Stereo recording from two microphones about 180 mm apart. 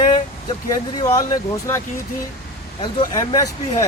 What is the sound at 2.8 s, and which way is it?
Speech, 20° left (ahead or behind).